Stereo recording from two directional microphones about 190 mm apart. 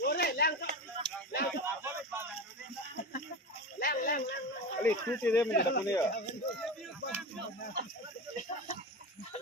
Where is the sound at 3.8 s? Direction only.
50° left (ahead or behind).